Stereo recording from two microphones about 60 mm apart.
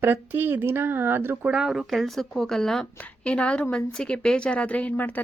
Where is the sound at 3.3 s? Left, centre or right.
Centre.